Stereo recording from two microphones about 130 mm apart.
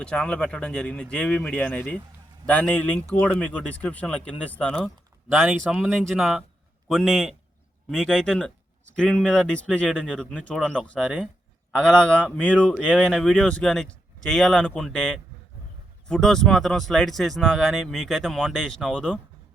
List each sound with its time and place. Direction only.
0.0 s speech: 5° left (ahead or behind)
5.3 s speech: 5° right (ahead or behind)